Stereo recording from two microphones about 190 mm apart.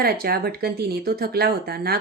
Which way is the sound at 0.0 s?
55° right (ahead or behind).